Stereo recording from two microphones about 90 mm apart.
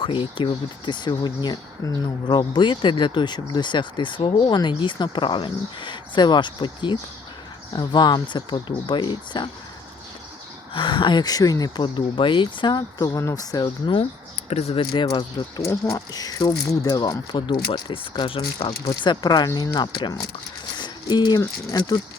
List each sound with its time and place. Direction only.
0.0 s speech: 70° left (ahead or behind)
10.8 s speech: 65° left (ahead or behind)
13.0 s speech: 40° left (ahead or behind)
14.7 s speech: 80° left
15.7 s speech: 40° left (ahead or behind); by 18.7 s 85° left
19.0 s speech: 50° left (ahead or behind)
20.7 s a sound: 55° left (ahead or behind)
21.7 s speech: 45° left (ahead or behind)